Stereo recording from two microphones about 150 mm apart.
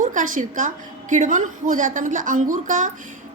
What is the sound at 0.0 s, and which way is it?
A woman's voice, 55° right (ahead or behind).